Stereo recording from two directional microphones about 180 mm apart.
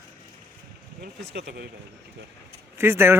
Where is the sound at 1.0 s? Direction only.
70° right (ahead or behind).